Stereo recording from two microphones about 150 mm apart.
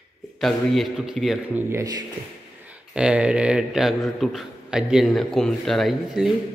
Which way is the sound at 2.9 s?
5° right (ahead or behind).